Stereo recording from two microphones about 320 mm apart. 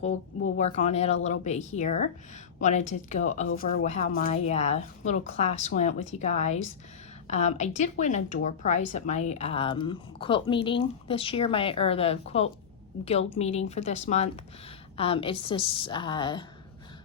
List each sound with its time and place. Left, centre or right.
0.5 s a woman's voice: left